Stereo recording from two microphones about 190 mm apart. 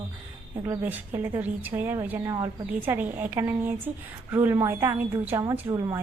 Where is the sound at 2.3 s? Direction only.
25° right (ahead or behind).